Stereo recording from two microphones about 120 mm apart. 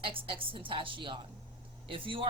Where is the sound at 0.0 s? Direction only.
45° right (ahead or behind).